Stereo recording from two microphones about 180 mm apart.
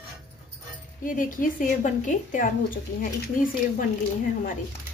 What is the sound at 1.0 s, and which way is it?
A woman's voice, 50° left (ahead or behind).